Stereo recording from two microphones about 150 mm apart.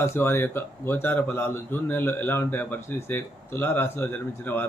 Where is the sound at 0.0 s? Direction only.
15° left (ahead or behind).